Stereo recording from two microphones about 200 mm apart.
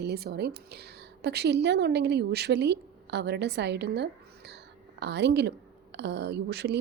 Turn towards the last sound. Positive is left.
turn(degrees=-55)  # may be behind; listen again after turning